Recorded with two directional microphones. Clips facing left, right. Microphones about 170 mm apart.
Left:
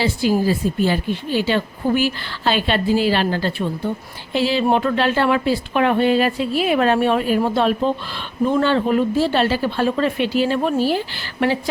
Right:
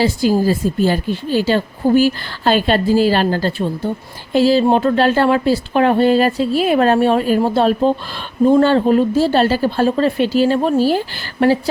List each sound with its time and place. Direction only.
0.0 s a woman's voice: 40° right (ahead or behind)